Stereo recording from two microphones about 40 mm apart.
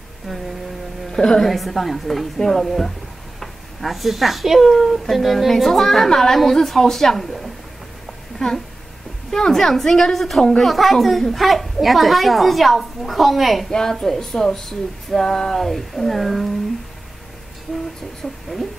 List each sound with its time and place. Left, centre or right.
1.1 s a woman's voice: centre
1.5 s a woman's voice: centre
13.7 s a woman's voice: centre
18.2 s speech: left